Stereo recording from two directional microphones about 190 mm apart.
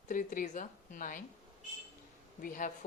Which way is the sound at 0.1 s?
45° left (ahead or behind).